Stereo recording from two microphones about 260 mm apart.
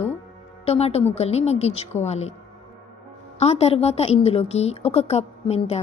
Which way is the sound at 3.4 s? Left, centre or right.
Left.